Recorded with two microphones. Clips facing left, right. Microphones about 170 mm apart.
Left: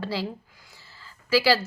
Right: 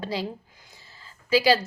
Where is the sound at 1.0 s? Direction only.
20° right (ahead or behind).